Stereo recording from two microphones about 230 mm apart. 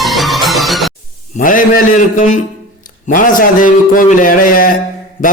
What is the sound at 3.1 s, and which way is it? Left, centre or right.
Speech, left.